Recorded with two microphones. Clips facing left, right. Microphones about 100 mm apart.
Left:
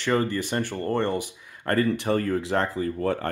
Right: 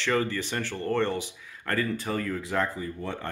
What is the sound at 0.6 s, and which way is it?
Speech, 50° left (ahead or behind).